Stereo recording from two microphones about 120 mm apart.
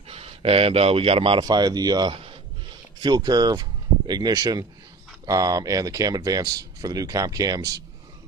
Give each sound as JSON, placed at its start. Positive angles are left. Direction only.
{"t": 0.1, "sound": "speech", "side_deg": -55}